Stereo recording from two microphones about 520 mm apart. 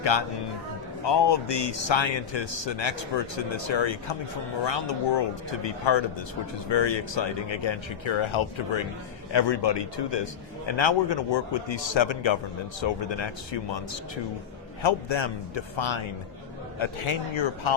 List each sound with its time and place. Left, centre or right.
0.0 s speech: left
14.8 s speech: left